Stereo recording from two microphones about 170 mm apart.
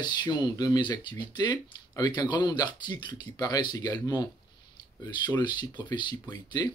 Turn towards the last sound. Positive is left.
turn(degrees=25)  # may be behind; listen again after turning